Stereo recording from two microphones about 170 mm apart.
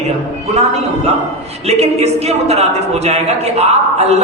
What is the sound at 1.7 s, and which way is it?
A woman's voice, 40° right (ahead or behind).